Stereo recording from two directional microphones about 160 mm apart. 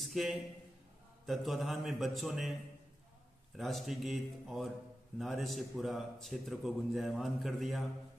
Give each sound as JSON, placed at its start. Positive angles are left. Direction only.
{"t": 0.0, "sound": "a sound", "side_deg": 0}
{"t": 1.2, "sound": "a man's voice", "side_deg": 0}
{"t": 3.5, "sound": "a man's voice", "side_deg": 0}